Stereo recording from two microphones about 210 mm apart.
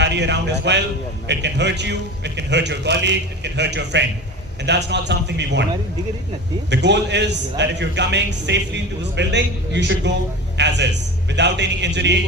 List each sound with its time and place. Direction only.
0.0 s a man's voice: 55° right (ahead or behind)
6.7 s a man's voice: 55° right (ahead or behind)